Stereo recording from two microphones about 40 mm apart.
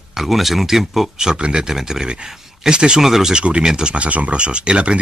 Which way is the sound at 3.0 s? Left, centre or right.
Centre.